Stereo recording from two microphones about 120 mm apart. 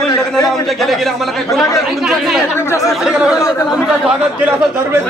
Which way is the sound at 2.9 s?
5° right (ahead or behind).